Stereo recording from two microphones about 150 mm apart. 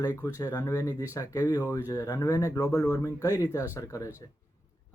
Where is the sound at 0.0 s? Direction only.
20° left (ahead or behind).